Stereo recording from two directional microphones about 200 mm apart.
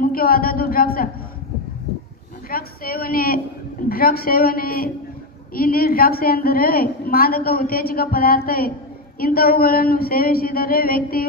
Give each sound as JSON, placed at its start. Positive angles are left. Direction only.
{"t": 0.0, "sound": "a woman's voice", "side_deg": 45}
{"t": 2.5, "sound": "a woman's voice", "side_deg": 45}